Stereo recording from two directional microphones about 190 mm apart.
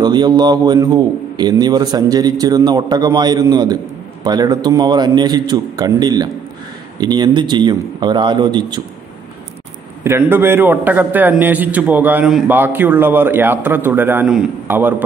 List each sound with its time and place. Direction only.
0.0 s a man's voice: 20° right (ahead or behind)
10.0 s a man's voice: 10° right (ahead or behind)